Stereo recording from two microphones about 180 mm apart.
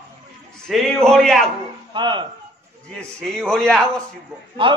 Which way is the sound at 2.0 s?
25° right (ahead or behind).